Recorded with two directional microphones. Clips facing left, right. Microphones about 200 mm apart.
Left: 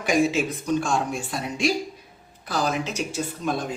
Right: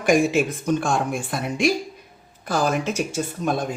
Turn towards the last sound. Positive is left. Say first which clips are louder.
# right 3 dB
turn(degrees=-50)  # may be behind; listen again after turning